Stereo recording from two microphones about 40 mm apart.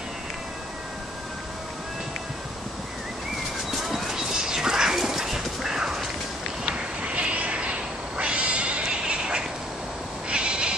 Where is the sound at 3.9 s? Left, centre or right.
Centre.